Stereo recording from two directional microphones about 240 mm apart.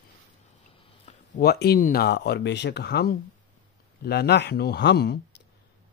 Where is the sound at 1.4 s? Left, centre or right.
Left.